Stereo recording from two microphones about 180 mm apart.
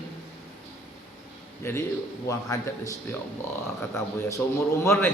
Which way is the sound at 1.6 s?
15° left (ahead or behind).